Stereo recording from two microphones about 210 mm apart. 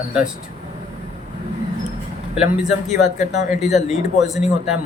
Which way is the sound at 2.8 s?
35° left (ahead or behind).